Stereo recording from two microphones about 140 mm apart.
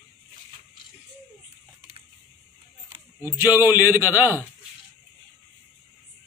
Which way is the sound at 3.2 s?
20° right (ahead or behind).